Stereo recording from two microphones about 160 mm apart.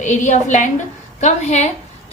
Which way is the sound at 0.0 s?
50° left (ahead or behind).